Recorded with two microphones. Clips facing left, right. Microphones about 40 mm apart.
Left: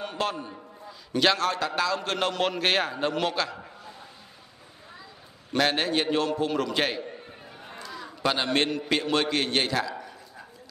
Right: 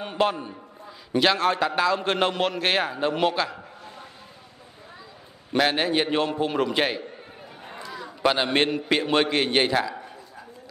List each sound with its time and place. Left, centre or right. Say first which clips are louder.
0.0 s a man's voice: right 5 dB; centre
1.1 s a man's voice: right 2 dB; centre
1.4 s a man's voice: right 4 dB; right
2.4 s a man's voice: right 1 dB; centre
5.5 s a man's voice: right 2 dB; centre
7.6 s a sound: right 3 dB; centre
8.2 s a man's voice: right 3 dB; centre